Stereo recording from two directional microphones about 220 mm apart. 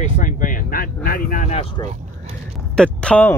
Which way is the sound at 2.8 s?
5° left (ahead or behind).